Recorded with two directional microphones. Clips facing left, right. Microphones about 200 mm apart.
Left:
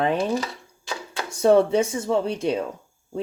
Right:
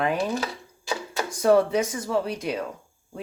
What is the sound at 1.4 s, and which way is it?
Speech, 25° left (ahead or behind).